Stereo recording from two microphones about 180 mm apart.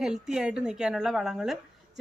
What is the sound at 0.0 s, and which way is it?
A woman's voice, centre (ahead or behind).